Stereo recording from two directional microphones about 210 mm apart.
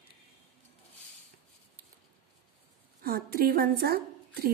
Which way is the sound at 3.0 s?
45° right (ahead or behind).